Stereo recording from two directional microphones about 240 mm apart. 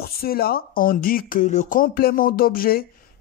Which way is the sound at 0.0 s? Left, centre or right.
Left.